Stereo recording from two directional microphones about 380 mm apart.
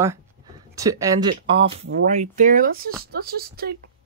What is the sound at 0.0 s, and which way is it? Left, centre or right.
Speech, centre.